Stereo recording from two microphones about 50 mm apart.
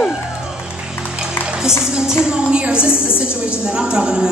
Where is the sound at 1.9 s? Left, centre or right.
Centre.